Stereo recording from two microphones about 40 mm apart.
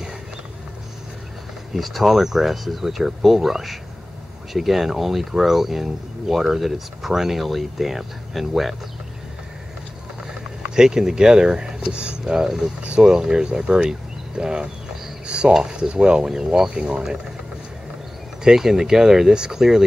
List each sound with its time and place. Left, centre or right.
1.7 s speech: centre
10.7 s speech: centre
15.2 s a sound: right
15.5 s speech: centre
18.4 s speech: centre